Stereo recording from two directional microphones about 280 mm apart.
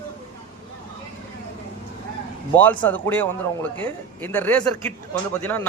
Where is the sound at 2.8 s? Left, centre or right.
Centre.